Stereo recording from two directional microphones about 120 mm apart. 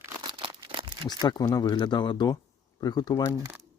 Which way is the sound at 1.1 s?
35° left (ahead or behind).